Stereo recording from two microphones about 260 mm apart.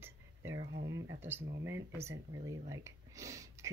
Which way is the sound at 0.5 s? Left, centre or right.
Right.